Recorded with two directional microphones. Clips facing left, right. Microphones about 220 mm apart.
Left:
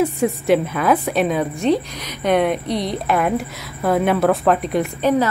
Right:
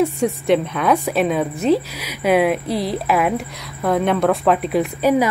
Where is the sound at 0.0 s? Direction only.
Centre (ahead or behind).